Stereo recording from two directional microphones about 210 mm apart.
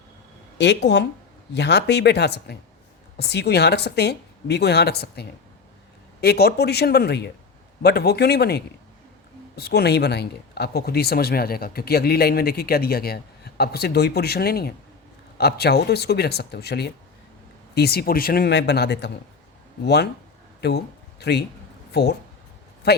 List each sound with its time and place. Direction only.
0.6 s speech: 55° left (ahead or behind)